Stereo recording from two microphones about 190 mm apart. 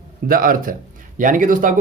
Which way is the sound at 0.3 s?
50° right (ahead or behind).